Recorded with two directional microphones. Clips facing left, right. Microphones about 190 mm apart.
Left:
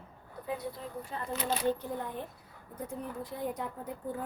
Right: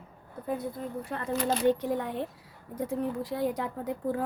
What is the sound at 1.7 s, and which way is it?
A woman's voice, 80° right.